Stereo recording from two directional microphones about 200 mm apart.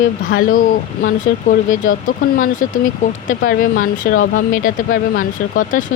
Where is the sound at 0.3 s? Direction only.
45° left (ahead or behind).